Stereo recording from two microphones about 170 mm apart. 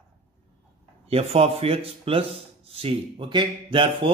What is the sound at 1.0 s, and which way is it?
Speech, 35° right (ahead or behind).